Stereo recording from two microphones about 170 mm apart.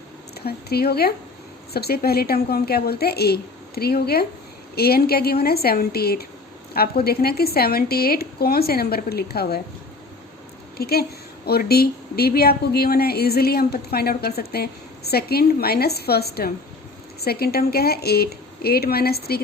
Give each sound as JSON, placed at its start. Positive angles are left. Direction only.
{"t": 0.3, "sound": "a woman's voice", "side_deg": 65}
{"t": 10.8, "sound": "a woman's voice", "side_deg": 65}